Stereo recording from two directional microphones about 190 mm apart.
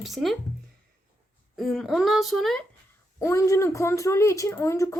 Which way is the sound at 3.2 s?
15° left (ahead or behind).